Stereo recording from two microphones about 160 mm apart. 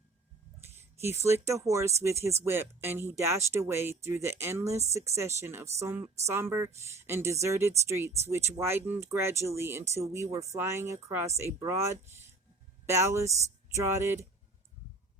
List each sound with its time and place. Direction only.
1.0 s speech: 15° right (ahead or behind)